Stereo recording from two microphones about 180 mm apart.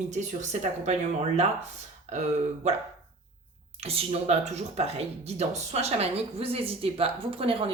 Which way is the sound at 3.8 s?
30° right (ahead or behind).